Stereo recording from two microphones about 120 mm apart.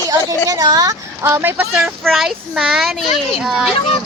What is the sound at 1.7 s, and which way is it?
A child's voice, centre (ahead or behind).